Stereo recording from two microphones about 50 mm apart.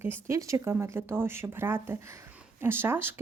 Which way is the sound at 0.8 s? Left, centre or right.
Right.